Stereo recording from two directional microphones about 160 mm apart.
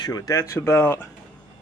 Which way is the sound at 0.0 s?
25° left (ahead or behind).